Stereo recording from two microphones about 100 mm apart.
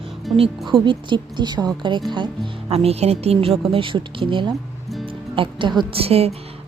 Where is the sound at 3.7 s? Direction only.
60° right (ahead or behind).